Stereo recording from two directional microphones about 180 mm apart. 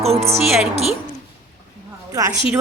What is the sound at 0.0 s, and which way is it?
Speech, 35° right (ahead or behind).